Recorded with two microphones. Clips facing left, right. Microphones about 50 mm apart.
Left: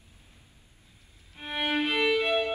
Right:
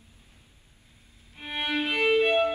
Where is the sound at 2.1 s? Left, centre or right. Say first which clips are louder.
Right 4 dB; right.